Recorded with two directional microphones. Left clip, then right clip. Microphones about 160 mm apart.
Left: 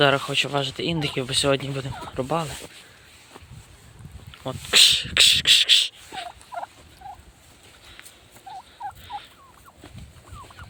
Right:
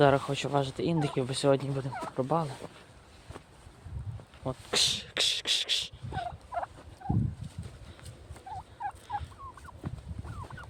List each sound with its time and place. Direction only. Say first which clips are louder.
0.0 s speech: left 5 dB; centre (ahead or behind); by 2.4 s 20° left (ahead or behind)
4.4 s speech: left 12 dB; 10° left (ahead or behind)
6.5 s fowl: left 2 dB; 20° right (ahead or behind)